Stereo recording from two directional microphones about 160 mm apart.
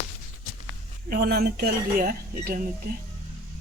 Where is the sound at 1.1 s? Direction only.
70° right (ahead or behind).